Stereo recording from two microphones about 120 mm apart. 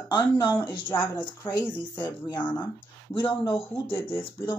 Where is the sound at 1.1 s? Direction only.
15° left (ahead or behind).